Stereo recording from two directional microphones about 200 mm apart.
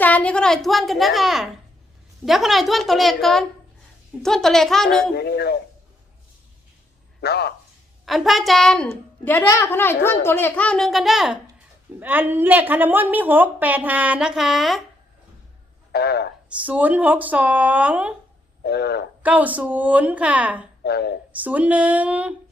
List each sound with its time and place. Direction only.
0.0 s a child's voice: 5° left (ahead or behind)
5.1 s a man's voice: 55° left (ahead or behind)
7.2 s a man's voice: 55° left (ahead or behind)
8.0 s a child's voice: centre (ahead or behind)
15.9 s a man's voice: 55° left (ahead or behind)
16.6 s a woman's voice: 5° right (ahead or behind)
18.6 s a man's voice: 55° left (ahead or behind)
19.2 s a woman's voice: 5° right (ahead or behind)
20.8 s speech: 55° left (ahead or behind)
21.4 s a woman's voice: 5° right (ahead or behind)